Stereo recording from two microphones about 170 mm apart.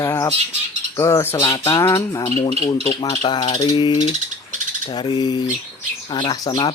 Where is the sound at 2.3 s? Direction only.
40° left (ahead or behind).